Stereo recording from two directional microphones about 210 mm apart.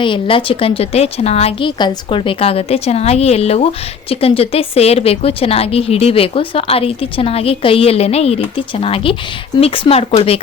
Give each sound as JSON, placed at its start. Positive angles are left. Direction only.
{"t": 0.0, "sound": "a woman's voice", "side_deg": 25}